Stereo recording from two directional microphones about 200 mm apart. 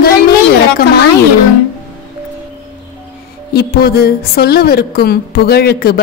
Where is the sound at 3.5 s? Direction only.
50° left (ahead or behind).